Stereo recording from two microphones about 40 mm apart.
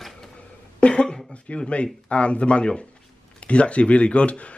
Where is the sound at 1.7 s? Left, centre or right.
Left.